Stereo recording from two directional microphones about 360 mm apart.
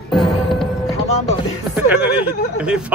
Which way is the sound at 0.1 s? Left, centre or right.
Centre.